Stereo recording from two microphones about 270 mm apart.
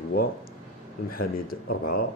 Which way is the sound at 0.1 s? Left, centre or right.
Left.